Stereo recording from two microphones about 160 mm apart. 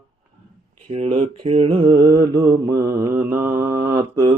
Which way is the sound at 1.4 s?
35° right (ahead or behind).